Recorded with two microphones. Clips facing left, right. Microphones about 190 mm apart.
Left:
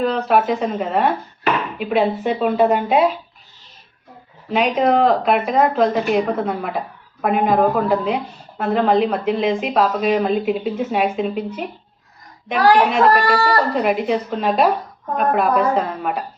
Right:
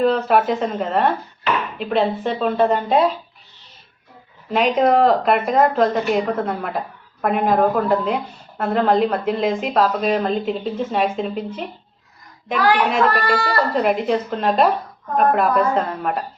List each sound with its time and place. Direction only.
0.0 s a woman's voice: centre (ahead or behind)
4.5 s speech: centre (ahead or behind)
12.5 s speech: 35° left (ahead or behind)
13.7 s speech: centre (ahead or behind)